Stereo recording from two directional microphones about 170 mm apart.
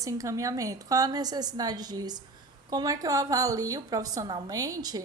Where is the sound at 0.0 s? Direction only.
20° right (ahead or behind).